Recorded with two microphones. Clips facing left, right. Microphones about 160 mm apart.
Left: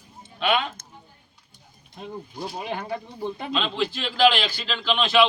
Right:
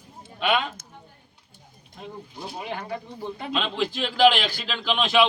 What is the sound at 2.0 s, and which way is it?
Speech, 20° left (ahead or behind).